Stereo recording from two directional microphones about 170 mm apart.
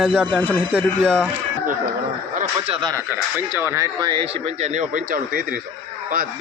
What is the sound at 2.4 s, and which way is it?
Speech, 35° right (ahead or behind).